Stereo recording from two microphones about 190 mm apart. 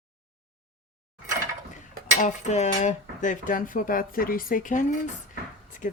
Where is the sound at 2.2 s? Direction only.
35° left (ahead or behind).